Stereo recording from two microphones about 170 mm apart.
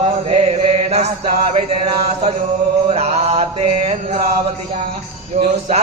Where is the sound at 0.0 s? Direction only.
35° right (ahead or behind).